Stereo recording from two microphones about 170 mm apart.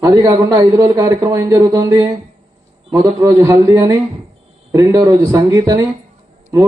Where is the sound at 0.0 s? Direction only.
20° right (ahead or behind).